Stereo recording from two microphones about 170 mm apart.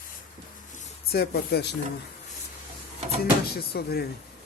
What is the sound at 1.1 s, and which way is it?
Speech, 65° left (ahead or behind).